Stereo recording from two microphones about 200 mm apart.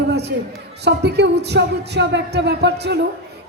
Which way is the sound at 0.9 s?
60° right (ahead or behind).